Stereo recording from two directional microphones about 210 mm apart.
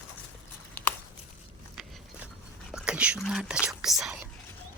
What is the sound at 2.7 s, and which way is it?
Whispering, 5° right (ahead or behind).